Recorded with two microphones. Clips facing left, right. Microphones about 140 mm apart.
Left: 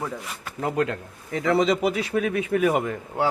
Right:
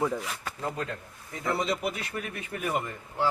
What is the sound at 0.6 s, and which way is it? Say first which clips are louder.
A man's voice: left 10 dB; 80° left.